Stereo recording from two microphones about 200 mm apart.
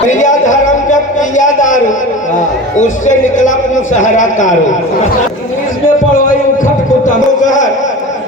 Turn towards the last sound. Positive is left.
turn(degrees=40)  # may be behind; listen again after turning